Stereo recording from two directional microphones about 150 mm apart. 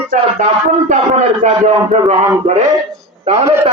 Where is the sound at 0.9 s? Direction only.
50° right (ahead or behind).